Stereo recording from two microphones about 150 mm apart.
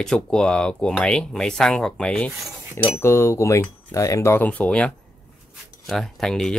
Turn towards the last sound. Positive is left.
turn(degrees=5)  # may be behind; listen again after turning